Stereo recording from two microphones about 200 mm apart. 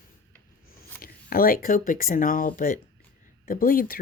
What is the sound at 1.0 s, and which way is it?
Speech, 45° left (ahead or behind).